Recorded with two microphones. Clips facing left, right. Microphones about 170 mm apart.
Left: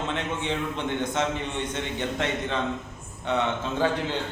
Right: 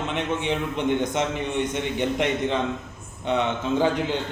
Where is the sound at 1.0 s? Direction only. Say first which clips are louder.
Right 2 dB; 15° right (ahead or behind).